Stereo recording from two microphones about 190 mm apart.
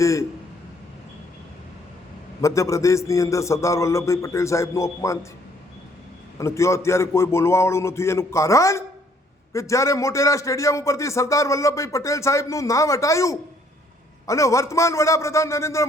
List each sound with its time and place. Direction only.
0.0 s a man's voice: 15° left (ahead or behind)
2.4 s a man's voice: 15° left (ahead or behind)
6.4 s a man's voice: 15° left (ahead or behind)